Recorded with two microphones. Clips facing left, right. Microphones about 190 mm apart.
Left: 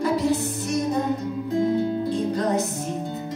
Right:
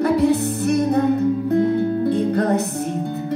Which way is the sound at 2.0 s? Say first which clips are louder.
Right 5 dB; 60° right (ahead or behind).